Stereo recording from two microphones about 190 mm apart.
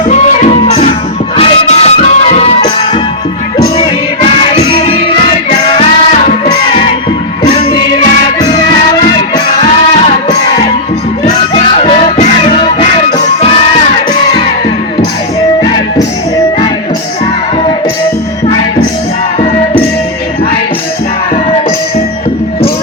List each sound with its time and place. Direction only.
0.1 s music: 35° left (ahead or behind)
4.7 s music: 30° left (ahead or behind)
7.4 s music: 35° left (ahead or behind)
11.5 s music: 35° left (ahead or behind)